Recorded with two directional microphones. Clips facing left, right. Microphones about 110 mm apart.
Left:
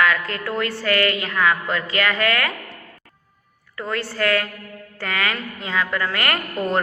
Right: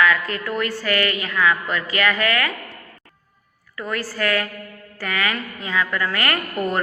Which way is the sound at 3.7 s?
25° left (ahead or behind).